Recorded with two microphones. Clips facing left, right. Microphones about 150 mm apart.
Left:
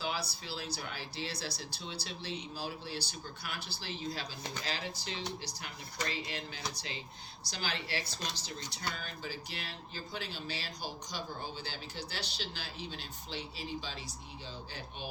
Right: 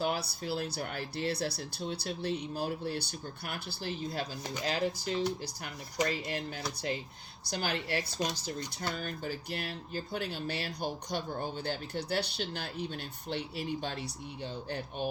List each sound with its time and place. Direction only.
0.0 s speech: 55° right (ahead or behind)